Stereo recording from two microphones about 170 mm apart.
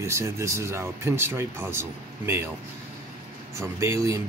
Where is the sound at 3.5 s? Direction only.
15° right (ahead or behind).